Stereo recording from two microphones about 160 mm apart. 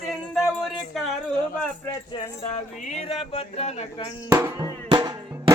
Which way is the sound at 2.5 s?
40° left (ahead or behind).